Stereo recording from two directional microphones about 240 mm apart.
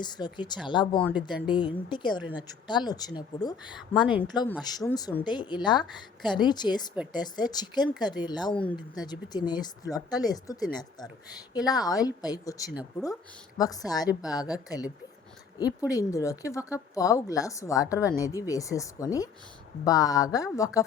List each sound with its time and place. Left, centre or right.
0.0 s a woman's voice: centre
8.5 s speech: centre
9.0 s a woman's voice: centre
15.9 s a woman's voice: centre